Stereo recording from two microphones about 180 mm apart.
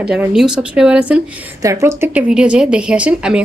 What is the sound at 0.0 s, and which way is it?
Speech, 5° right (ahead or behind).